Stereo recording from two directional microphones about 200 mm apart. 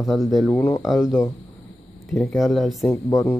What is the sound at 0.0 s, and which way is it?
Speech, centre (ahead or behind).